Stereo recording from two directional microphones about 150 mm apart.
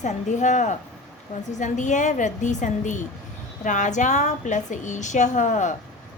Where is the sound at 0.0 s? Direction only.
55° left (ahead or behind).